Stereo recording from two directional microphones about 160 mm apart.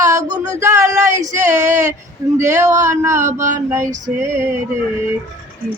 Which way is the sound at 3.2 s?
50° right (ahead or behind).